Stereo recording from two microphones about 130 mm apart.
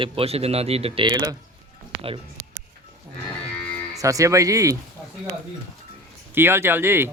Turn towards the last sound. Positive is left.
turn(degrees=-20)  # may be behind; listen again after turning